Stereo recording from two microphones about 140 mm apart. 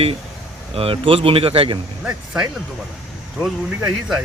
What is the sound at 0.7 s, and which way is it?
Speech, 40° right (ahead or behind).